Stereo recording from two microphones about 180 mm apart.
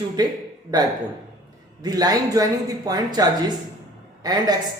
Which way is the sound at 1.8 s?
20° right (ahead or behind).